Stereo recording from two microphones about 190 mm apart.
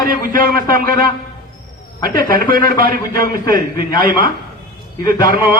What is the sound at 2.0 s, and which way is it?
A man's voice, 50° right (ahead or behind).